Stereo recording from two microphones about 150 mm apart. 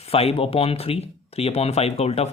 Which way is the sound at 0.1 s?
40° left (ahead or behind).